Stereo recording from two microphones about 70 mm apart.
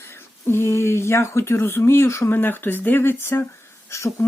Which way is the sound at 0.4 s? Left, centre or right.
Left.